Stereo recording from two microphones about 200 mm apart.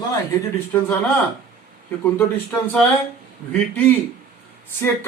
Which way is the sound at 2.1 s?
5° left (ahead or behind).